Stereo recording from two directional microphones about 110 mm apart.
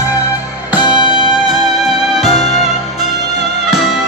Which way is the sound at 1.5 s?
5° right (ahead or behind).